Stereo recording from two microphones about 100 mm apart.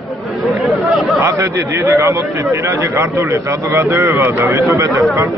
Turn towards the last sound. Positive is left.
turn(degrees=-30)  # may be behind; listen again after turning